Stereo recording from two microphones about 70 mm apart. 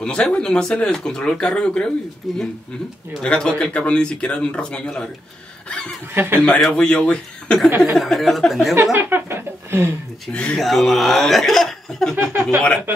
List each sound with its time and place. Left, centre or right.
0.0 s speech: centre
2.3 s speech: centre
3.2 s speech: centre
6.1 s speech: right
6.6 s speech: centre
8.9 s speech: right
10.3 s speech: centre
10.6 s speech: centre
12.2 s speech: right